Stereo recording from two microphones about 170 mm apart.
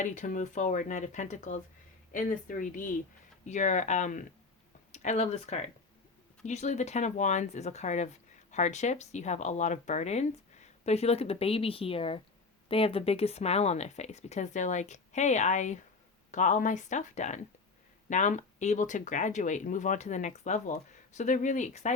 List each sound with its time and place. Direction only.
0.0 s speech: 50° left (ahead or behind)